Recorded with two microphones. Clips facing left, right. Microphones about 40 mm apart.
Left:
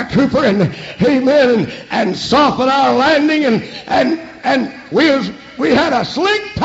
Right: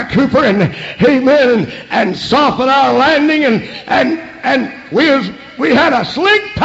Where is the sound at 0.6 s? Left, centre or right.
Right.